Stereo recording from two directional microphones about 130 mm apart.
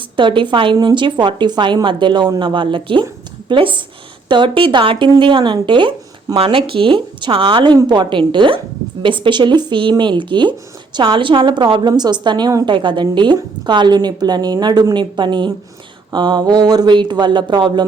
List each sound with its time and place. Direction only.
0.2 s a woman's voice: 40° right (ahead or behind)